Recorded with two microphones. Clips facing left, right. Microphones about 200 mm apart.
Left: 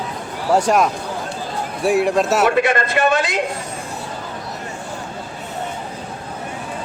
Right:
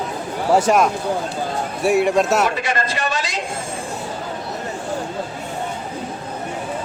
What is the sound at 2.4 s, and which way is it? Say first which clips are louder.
Speech: left 5 dB; 55° left (ahead or behind).